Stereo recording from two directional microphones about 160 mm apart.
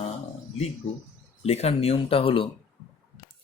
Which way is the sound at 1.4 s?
40° left (ahead or behind).